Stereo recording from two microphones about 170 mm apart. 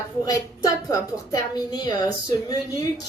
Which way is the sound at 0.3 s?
20° left (ahead or behind).